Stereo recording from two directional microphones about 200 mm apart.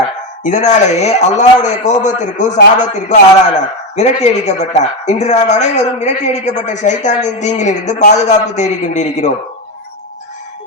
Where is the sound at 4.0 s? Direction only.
35° left (ahead or behind).